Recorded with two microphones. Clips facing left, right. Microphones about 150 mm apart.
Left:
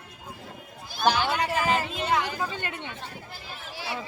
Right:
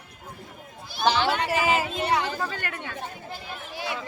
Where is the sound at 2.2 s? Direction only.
15° left (ahead or behind).